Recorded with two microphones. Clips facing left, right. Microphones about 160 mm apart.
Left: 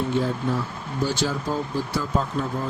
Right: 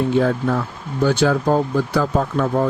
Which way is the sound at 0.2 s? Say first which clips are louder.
Right 6 dB; 75° right (ahead or behind).